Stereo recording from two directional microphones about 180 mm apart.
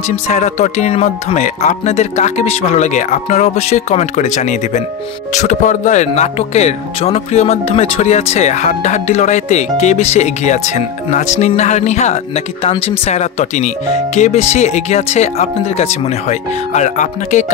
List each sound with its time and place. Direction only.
0.1 s speech: 40° left (ahead or behind)